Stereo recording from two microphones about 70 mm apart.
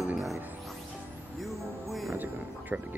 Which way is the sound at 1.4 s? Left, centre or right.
Centre.